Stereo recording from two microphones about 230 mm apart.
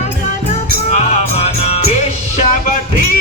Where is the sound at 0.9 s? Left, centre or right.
Left.